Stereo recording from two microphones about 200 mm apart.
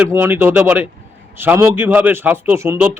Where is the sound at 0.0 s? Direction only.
10° right (ahead or behind).